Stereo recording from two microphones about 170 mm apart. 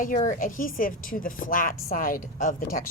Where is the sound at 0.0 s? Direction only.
50° left (ahead or behind).